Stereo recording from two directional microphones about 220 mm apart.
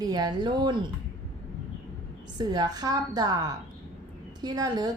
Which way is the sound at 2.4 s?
20° right (ahead or behind).